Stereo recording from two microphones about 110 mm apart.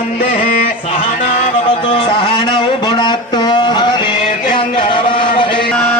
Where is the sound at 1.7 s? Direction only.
50° left (ahead or behind).